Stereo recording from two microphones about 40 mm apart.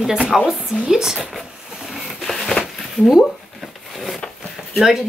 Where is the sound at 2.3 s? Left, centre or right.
Centre.